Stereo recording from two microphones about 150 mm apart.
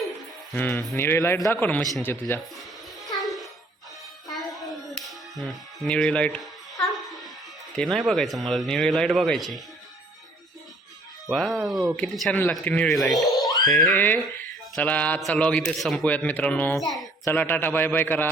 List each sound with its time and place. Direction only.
0.5 s speech: 10° left (ahead or behind)
3.2 s music: centre (ahead or behind)
7.8 s speech: centre (ahead or behind)
11.3 s speech: centre (ahead or behind)
13.9 s speech: 10° left (ahead or behind)
16.8 s a sound: centre (ahead or behind)
17.2 s speech: 15° left (ahead or behind)